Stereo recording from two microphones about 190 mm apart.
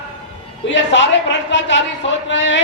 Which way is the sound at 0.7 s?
70° left (ahead or behind).